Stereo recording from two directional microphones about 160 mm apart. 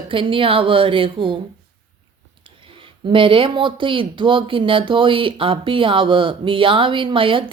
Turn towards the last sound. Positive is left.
turn(degrees=-35)  # may be behind; listen again after turning